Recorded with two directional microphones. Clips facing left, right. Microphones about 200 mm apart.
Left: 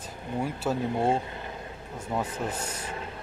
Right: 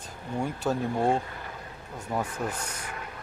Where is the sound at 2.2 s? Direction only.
20° left (ahead or behind).